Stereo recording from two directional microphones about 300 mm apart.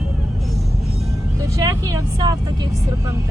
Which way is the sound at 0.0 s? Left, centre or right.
Centre.